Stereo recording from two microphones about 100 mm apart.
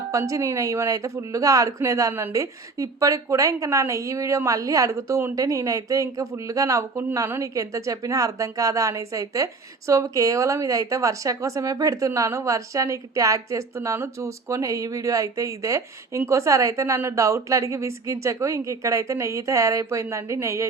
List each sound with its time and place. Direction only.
0.1 s a woman's voice: 30° right (ahead or behind)